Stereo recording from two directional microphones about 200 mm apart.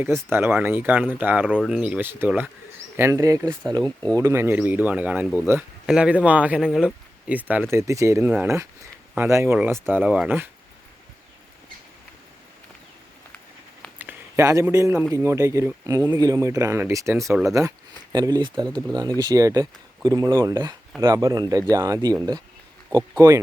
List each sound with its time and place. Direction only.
0.0 s speech: 10° right (ahead or behind)
1.5 s speech: centre (ahead or behind)
14.0 s speech: 10° right (ahead or behind)